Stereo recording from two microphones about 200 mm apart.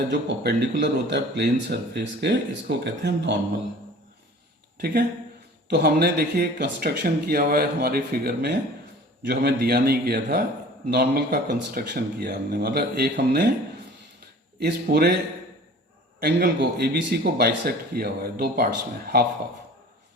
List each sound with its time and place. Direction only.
0.1 s speech: 60° right (ahead or behind)
5.6 s speech: 55° right (ahead or behind)
14.6 s speech: 50° right (ahead or behind)
16.2 s speech: 55° right (ahead or behind)